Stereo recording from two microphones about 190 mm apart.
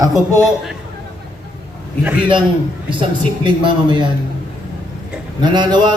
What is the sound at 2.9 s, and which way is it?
Speech, 25° right (ahead or behind).